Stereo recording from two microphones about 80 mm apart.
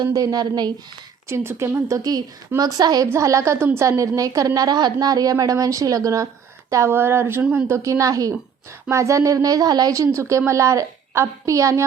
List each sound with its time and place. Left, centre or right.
0.0 s speech: right
1.3 s a woman's voice: right
2.0 s a woman's voice: right
3.1 s a woman's voice: right
9.9 s a woman's voice: right